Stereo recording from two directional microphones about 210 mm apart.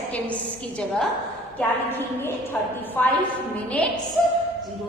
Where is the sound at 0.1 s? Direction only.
5° left (ahead or behind).